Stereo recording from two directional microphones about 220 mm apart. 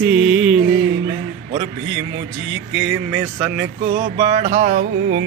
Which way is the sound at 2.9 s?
10° right (ahead or behind).